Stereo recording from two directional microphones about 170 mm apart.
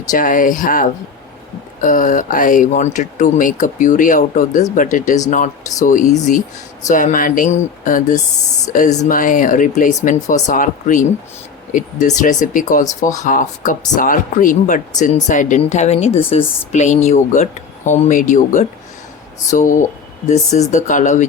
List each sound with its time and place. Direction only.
0.1 s speech: 50° left (ahead or behind)